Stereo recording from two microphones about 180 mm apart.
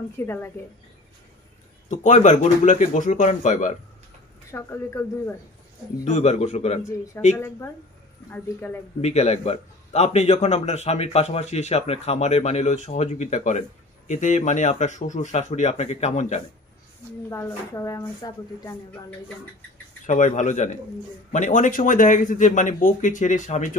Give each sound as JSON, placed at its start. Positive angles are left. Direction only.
{"t": 0.2, "sound": "a woman's voice", "side_deg": 15}
{"t": 1.9, "sound": "speech", "side_deg": 40}
{"t": 4.5, "sound": "a woman's voice", "side_deg": 15}
{"t": 6.0, "sound": "a man's voice", "side_deg": 40}
{"t": 7.3, "sound": "a woman's voice", "side_deg": 15}
{"t": 9.0, "sound": "a man's voice", "side_deg": 35}
{"t": 17.3, "sound": "a woman's voice", "side_deg": 15}
{"t": 20.1, "sound": "speech", "side_deg": 45}